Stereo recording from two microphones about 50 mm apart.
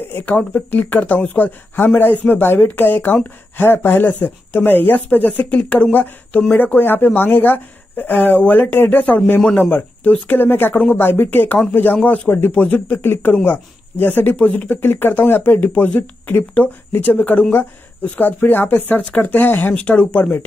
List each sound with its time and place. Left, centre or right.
0.2 s speech: left
9.0 s speech: left
10.3 s speech: left